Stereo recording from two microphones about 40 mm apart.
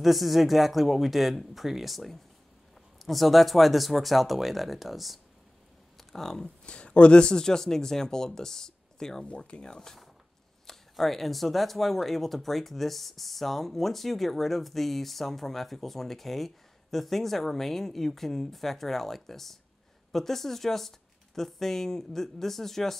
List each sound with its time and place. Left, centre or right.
0.0 s speech: centre
5.9 s a sound: centre
6.4 s speech: left
10.7 s speech: centre